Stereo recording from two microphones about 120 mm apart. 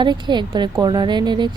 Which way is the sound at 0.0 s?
40° right (ahead or behind).